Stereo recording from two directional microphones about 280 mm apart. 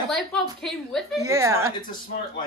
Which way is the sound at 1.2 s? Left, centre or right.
Centre.